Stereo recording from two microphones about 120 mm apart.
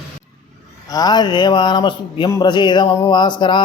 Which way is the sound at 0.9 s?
35° left (ahead or behind).